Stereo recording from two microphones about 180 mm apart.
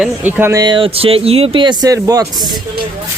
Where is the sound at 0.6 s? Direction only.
30° right (ahead or behind).